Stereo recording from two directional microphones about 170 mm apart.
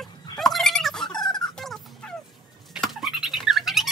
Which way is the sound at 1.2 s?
25° left (ahead or behind).